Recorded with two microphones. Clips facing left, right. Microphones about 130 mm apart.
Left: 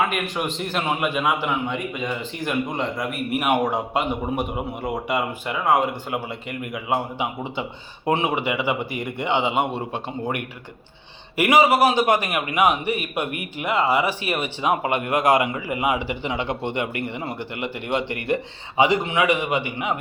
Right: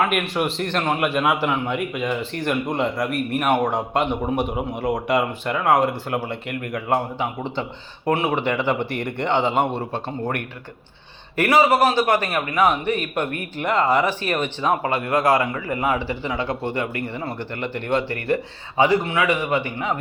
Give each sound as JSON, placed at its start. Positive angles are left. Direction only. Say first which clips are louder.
{"t": 0.0, "sound": "a man's voice", "louder": "right 2 dB", "side_deg": 0}
{"t": 3.2, "sound": "a man's voice", "louder": "left 1 dB", "side_deg": 10}